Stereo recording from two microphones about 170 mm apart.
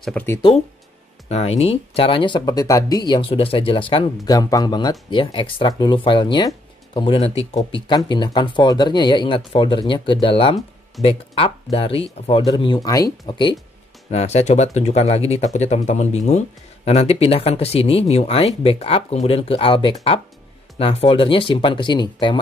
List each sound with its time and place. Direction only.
0.0 s speech: 5° left (ahead or behind)
1.3 s speech: 35° left (ahead or behind)
14.1 s speech: 40° left (ahead or behind)